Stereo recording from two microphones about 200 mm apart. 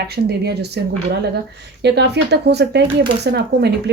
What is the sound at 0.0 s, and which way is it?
Speech, 55° right (ahead or behind).